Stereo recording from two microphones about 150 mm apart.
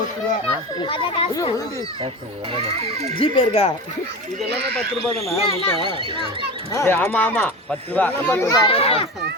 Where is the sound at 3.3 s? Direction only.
40° left (ahead or behind).